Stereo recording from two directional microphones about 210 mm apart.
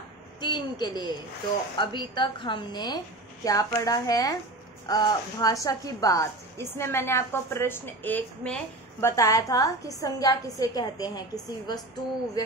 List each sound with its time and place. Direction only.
0.4 s a woman's voice: 20° left (ahead or behind)